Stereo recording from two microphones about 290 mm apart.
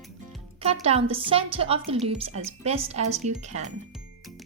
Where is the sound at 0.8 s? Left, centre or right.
Centre.